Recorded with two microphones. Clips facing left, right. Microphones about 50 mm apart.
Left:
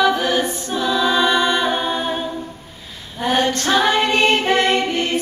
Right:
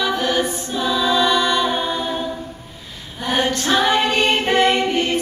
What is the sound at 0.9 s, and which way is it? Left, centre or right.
Choir, centre.